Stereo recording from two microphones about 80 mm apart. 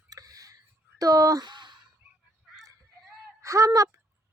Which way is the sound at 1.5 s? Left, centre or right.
Right.